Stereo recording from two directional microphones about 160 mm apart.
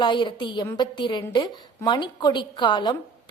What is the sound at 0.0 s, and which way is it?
A woman's voice, 30° left (ahead or behind).